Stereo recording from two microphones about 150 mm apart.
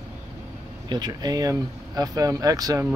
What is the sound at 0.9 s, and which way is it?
Speech, 25° right (ahead or behind).